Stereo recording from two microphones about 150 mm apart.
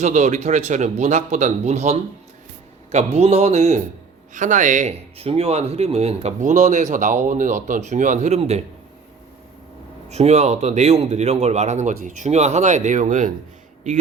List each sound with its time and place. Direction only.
0.0 s speech: 50° right (ahead or behind)
10.1 s speech: 45° right (ahead or behind)